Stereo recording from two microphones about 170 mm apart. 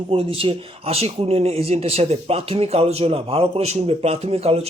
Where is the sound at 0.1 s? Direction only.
35° right (ahead or behind).